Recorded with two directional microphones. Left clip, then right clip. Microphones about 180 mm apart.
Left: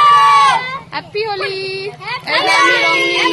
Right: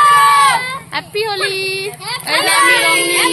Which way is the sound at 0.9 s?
10° right (ahead or behind).